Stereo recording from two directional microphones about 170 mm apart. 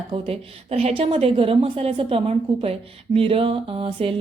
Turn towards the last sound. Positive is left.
turn(degrees=-35)  # may be behind; listen again after turning